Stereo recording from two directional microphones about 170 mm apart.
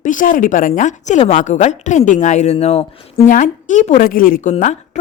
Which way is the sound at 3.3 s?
50° left (ahead or behind).